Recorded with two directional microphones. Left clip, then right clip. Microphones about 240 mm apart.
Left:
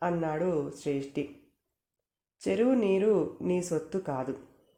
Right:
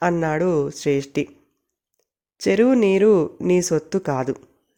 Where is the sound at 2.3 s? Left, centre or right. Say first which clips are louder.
Right 10 dB; right.